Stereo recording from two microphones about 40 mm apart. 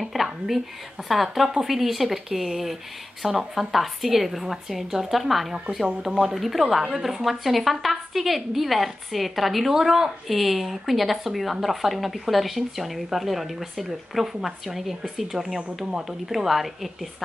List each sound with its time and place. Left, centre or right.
0.0 s whispering: centre
1.0 s a woman's voice: centre
6.4 s a woman's voice: centre
15.8 s speech: centre
16.1 s a woman's voice: centre